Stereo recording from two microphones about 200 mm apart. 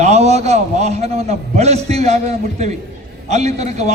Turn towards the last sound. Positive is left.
turn(degrees=-35)  # may be behind; listen again after turning